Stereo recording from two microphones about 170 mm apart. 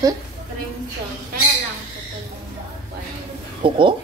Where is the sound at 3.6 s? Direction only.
30° right (ahead or behind).